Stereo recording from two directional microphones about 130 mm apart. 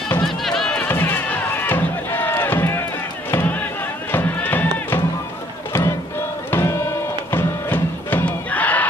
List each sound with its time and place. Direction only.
0.2 s run: centre (ahead or behind)
0.8 s music: 15° left (ahead or behind)
3.3 s a sound: 15° left (ahead or behind)
4.1 s music: 15° left (ahead or behind)
5.7 s crowd: 25° left (ahead or behind)
6.5 s music: 20° left (ahead or behind)